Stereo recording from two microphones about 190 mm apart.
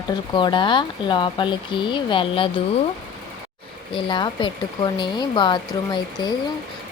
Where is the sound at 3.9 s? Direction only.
25° left (ahead or behind).